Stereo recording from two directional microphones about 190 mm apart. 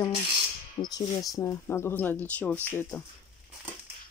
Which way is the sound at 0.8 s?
20° left (ahead or behind).